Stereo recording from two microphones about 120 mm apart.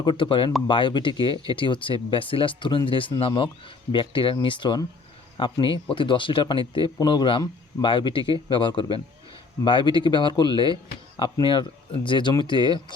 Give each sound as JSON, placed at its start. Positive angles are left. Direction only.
{"t": 0.0, "sound": "speech", "side_deg": 40}